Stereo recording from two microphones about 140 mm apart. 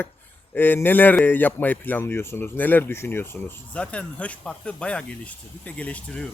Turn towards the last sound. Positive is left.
turn(degrees=10)  # may be behind; listen again after turning